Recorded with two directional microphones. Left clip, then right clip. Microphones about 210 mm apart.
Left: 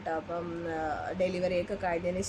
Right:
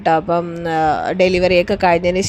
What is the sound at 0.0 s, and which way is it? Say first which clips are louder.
Speech: right 19 dB; 40° right (ahead or behind).